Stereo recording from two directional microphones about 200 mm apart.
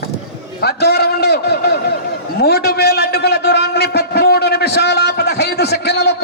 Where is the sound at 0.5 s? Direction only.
55° left (ahead or behind).